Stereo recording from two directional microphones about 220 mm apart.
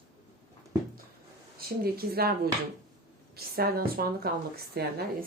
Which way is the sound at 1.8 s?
45° right (ahead or behind).